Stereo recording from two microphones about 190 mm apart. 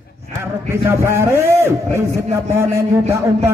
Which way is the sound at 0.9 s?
15° right (ahead or behind).